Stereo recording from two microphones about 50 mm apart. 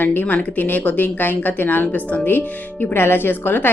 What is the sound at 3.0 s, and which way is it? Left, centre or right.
Speech, left.